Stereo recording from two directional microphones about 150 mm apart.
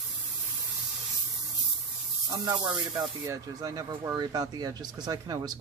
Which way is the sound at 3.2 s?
25° right (ahead or behind).